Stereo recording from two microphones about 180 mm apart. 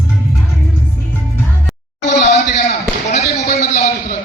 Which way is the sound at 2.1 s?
40° left (ahead or behind).